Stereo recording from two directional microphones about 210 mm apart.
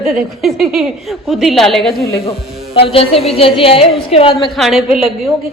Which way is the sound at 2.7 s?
25° left (ahead or behind).